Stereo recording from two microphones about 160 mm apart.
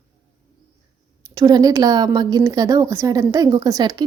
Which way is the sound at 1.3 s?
25° right (ahead or behind).